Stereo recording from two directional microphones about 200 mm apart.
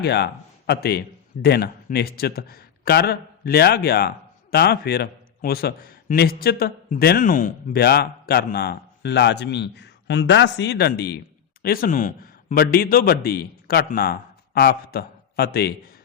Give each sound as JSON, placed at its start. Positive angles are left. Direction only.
{"t": 0.0, "sound": "a man's voice", "side_deg": 55}